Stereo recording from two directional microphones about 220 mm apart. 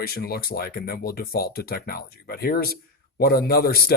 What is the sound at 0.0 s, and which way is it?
Speech, 45° left (ahead or behind).